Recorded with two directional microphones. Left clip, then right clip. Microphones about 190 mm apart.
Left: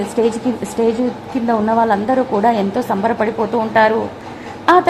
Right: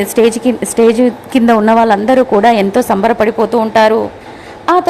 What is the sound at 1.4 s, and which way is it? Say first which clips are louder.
A woman's voice: right 6 dB; 35° right (ahead or behind).